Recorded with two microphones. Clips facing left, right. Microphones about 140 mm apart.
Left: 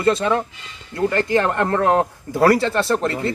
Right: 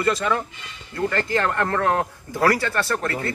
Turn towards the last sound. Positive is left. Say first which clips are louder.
# left 5 dB
turn(degrees=20)  # may be behind; listen again after turning